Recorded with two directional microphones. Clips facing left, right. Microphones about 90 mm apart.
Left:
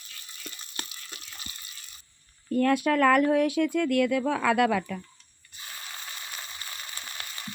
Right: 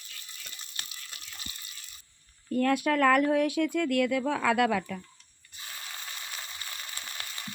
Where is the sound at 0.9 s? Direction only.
40° left (ahead or behind).